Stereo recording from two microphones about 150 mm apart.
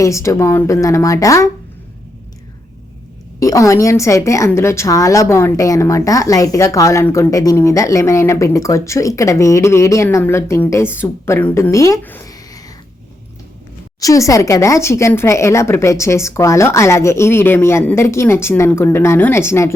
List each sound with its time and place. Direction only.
0.0 s a woman's voice: 20° left (ahead or behind)
3.4 s a woman's voice: 20° left (ahead or behind)
12.3 s a sound: 25° left (ahead or behind)
14.0 s a woman's voice: 20° left (ahead or behind)